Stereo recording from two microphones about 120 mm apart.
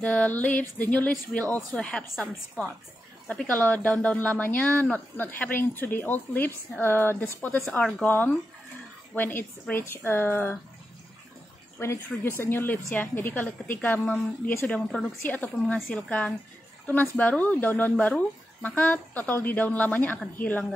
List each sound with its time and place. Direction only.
0.0 s speech: 10° left (ahead or behind)
3.3 s speech: 10° left (ahead or behind)
11.8 s speech: 20° left (ahead or behind)